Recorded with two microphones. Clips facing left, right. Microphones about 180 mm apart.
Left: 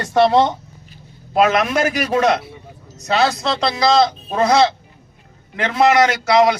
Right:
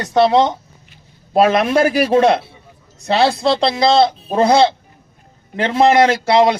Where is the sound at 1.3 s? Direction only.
30° right (ahead or behind).